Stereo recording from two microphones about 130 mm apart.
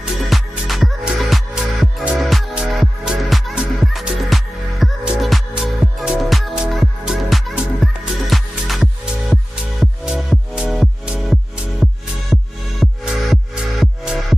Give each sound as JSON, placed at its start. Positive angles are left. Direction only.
{"t": 0.0, "sound": "music", "side_deg": 0}